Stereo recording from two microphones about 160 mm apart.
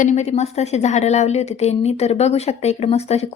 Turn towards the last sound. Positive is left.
turn(degrees=40)  # may be behind; listen again after turning